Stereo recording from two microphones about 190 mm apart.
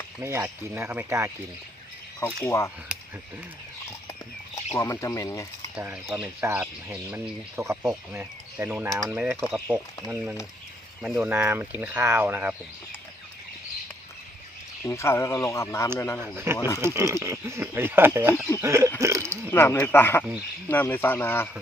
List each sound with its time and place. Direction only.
0.2 s speech: 15° right (ahead or behind)
2.2 s speech: 15° left (ahead or behind)
2.9 s a sound: 5° right (ahead or behind)
4.7 s speech: 15° left (ahead or behind)
5.7 s speech: 5° right (ahead or behind)
14.8 s speech: 15° left (ahead or behind)
16.2 s speech: 15° right (ahead or behind)
16.6 s speech: 15° left (ahead or behind)
16.8 s speech: 15° right (ahead or behind)
19.5 s speech: 10° left (ahead or behind)